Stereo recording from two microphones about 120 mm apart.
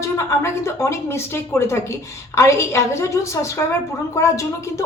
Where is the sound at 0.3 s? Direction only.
25° left (ahead or behind).